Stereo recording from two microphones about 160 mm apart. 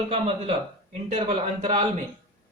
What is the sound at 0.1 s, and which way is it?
Speech, 40° right (ahead or behind).